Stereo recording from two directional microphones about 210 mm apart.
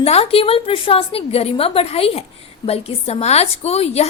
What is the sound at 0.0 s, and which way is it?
A woman's voice, 30° left (ahead or behind).